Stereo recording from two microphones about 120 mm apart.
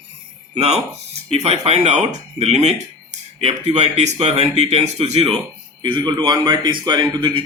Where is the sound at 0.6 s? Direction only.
65° right (ahead or behind).